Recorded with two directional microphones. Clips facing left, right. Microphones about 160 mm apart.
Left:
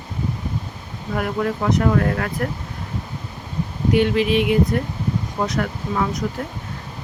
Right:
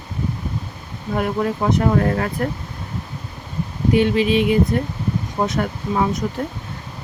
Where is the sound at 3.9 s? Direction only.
25° right (ahead or behind).